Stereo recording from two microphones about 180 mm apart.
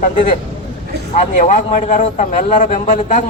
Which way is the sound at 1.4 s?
45° left (ahead or behind).